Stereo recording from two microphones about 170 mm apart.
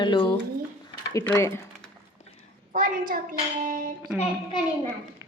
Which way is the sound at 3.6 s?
55° right (ahead or behind).